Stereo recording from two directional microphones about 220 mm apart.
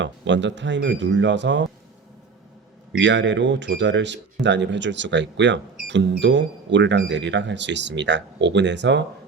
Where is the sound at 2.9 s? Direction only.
55° right (ahead or behind).